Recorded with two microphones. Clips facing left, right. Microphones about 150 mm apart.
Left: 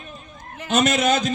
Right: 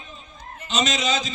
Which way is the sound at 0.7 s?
55° left (ahead or behind).